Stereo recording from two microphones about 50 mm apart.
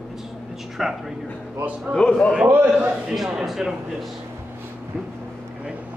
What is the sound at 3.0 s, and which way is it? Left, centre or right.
A man's voice, centre.